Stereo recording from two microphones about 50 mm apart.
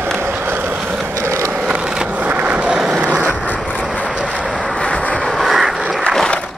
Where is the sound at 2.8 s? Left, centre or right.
Centre.